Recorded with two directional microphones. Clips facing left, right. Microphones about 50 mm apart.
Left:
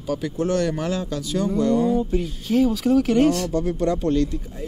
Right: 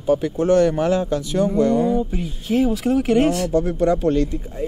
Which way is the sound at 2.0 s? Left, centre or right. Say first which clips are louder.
Left 1 dB; centre.